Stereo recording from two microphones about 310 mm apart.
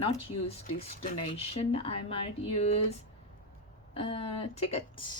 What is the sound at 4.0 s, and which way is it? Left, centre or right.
A woman's voice, centre.